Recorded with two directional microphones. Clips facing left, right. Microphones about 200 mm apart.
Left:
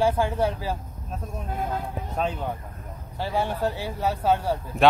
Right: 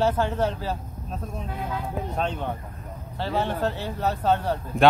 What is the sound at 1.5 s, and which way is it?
Speech, 45° left (ahead or behind).